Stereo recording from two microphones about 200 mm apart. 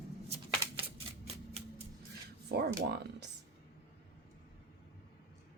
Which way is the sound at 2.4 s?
55° right (ahead or behind).